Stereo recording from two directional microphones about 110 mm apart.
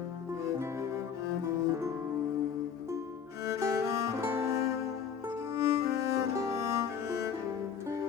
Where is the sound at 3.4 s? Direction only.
30° right (ahead or behind).